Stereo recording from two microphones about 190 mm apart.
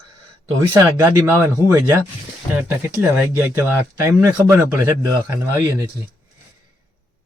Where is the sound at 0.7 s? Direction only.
15° right (ahead or behind).